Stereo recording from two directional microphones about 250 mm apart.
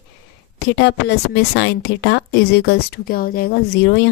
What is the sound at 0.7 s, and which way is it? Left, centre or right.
A woman's voice, left.